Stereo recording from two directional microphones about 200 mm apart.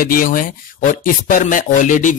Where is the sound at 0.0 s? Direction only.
45° left (ahead or behind).